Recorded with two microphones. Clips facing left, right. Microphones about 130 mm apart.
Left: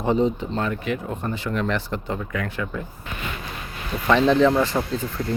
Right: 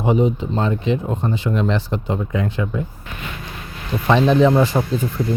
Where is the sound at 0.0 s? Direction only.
15° right (ahead or behind).